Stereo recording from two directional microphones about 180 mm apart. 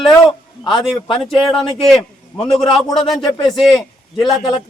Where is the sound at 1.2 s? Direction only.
Centre (ahead or behind).